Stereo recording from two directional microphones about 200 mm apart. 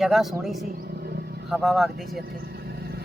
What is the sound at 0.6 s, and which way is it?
Vehicle, 50° right (ahead or behind).